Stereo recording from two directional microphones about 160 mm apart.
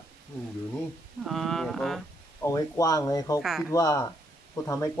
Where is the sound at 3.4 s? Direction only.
Centre (ahead or behind).